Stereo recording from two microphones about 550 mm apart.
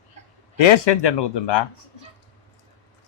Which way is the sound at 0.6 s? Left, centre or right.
Left.